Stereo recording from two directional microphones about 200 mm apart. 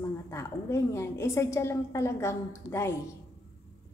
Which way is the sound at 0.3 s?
15° left (ahead or behind).